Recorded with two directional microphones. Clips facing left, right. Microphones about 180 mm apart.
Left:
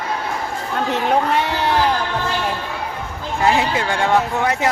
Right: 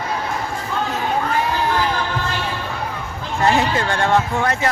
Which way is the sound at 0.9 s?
70° left (ahead or behind).